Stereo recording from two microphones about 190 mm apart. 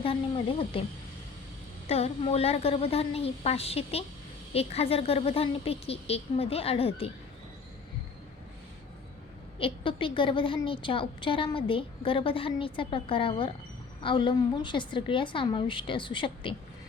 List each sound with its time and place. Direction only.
0.0 s a woman's voice: 30° left (ahead or behind)
1.9 s a woman's voice: 30° left (ahead or behind)
9.6 s a woman's voice: 30° left (ahead or behind)